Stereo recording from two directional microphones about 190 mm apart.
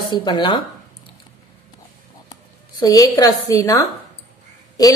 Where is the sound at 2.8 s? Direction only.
20° left (ahead or behind).